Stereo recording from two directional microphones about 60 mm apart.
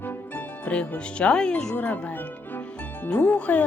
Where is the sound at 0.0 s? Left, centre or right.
Left.